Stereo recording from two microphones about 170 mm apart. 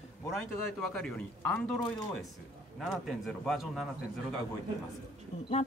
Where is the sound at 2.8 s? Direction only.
Centre (ahead or behind).